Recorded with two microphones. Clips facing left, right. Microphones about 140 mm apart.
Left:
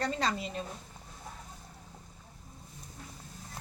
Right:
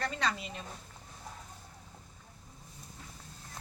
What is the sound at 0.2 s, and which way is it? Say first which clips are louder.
Speech: left 2 dB; 35° left (ahead or behind).